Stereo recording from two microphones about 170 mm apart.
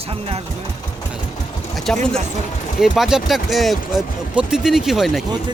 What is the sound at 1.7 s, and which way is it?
Speech, 5° left (ahead or behind).